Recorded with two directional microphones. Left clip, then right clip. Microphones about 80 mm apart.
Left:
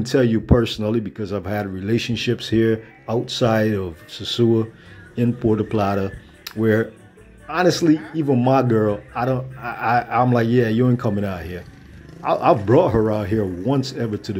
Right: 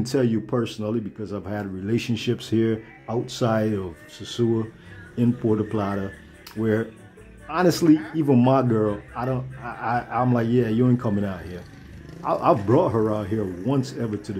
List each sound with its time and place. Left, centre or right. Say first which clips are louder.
0.0 s speech: left 5 dB; centre
2.0 s speech: left 3 dB; centre
4.1 s speech: left 6 dB; centre
5.1 s speech: left 3 dB; centre
7.5 s speech: left 2 dB; centre
8.5 s speech: left 3 dB; centre
12.2 s speech: left 4 dB; centre